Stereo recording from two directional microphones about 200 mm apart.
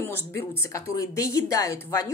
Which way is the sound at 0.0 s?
10° left (ahead or behind).